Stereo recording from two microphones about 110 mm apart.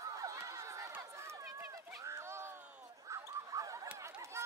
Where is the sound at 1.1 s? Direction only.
25° right (ahead or behind).